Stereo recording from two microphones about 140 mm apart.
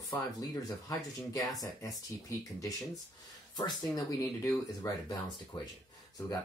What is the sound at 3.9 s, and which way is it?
Speech, 25° left (ahead or behind).